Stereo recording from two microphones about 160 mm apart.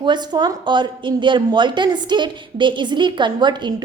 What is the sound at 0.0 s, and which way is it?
A woman's voice, 30° right (ahead or behind).